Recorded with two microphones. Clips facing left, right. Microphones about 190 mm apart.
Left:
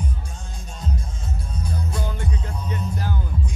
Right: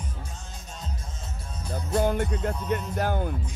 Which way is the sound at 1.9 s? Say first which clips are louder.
Right 6 dB; 60° right (ahead or behind).